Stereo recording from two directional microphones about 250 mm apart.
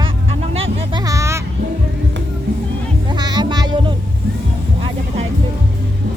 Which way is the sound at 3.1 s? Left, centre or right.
Centre.